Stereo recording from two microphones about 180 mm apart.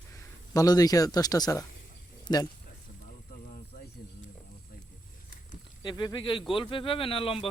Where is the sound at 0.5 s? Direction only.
20° left (ahead or behind).